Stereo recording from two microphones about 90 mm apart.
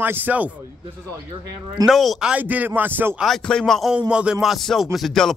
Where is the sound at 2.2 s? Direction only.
15° right (ahead or behind).